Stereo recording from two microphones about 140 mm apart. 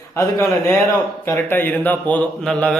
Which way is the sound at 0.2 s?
15° left (ahead or behind).